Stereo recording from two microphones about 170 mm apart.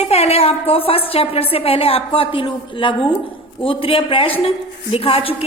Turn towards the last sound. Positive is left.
turn(degrees=35)  # may be behind; listen again after turning